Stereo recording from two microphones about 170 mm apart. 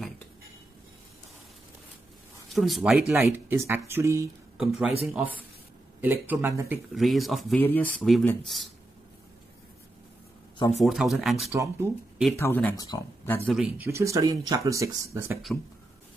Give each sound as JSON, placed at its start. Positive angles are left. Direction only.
{"t": 2.5, "sound": "speech", "side_deg": 0}
{"t": 3.3, "sound": "speech", "side_deg": -15}
{"t": 4.6, "sound": "speech", "side_deg": 0}
{"t": 6.9, "sound": "speech", "side_deg": 0}
{"t": 7.5, "sound": "speech", "side_deg": 10}
{"t": 10.8, "sound": "speech", "side_deg": 0}
{"t": 11.5, "sound": "speech", "side_deg": -15}
{"t": 12.4, "sound": "speech", "side_deg": 10}
{"t": 13.5, "sound": "speech", "side_deg": 0}
{"t": 13.8, "sound": "speech", "side_deg": -15}